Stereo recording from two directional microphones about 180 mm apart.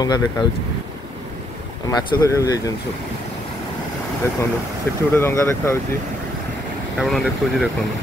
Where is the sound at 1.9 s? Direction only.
20° left (ahead or behind).